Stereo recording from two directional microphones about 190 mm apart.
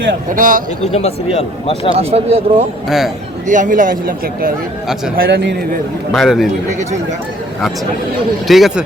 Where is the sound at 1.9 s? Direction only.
30° right (ahead or behind).